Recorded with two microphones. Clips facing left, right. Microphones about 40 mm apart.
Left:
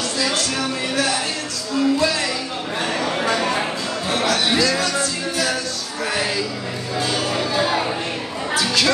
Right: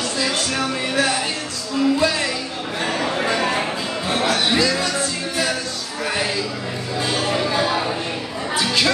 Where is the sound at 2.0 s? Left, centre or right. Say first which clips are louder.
Even; right.